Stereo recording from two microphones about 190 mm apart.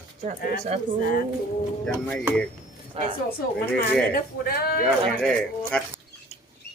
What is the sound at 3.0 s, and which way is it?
Speech, 30° right (ahead or behind).